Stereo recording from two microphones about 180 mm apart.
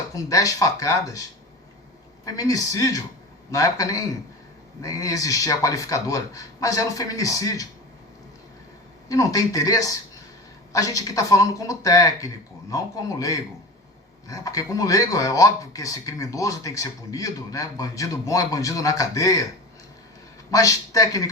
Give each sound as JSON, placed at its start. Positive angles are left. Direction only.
{"t": 0.1, "sound": "speech", "side_deg": 20}
{"t": 2.2, "sound": "speech", "side_deg": 20}
{"t": 9.0, "sound": "speech", "side_deg": 20}
{"t": 20.5, "sound": "speech", "side_deg": 20}